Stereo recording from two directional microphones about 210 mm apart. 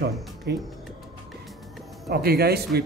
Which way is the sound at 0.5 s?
55° right (ahead or behind).